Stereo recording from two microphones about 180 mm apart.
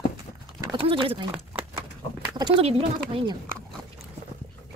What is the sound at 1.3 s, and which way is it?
Horse, 5° right (ahead or behind).